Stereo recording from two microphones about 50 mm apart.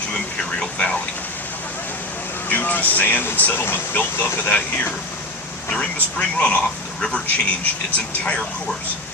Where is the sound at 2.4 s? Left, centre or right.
Left.